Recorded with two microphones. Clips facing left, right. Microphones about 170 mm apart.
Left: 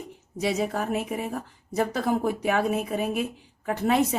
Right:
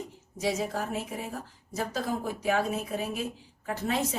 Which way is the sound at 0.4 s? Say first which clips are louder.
Left 4 dB; 60° left (ahead or behind).